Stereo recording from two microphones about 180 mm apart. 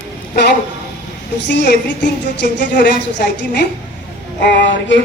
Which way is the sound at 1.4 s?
70° left (ahead or behind).